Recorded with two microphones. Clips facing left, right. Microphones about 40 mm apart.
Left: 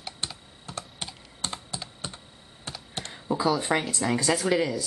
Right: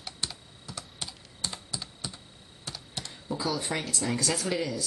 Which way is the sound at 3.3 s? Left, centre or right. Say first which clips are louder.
Left 6 dB; centre.